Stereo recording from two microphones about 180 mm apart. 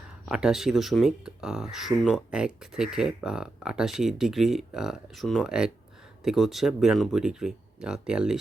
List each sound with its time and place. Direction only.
0.3 s speech: 5° right (ahead or behind)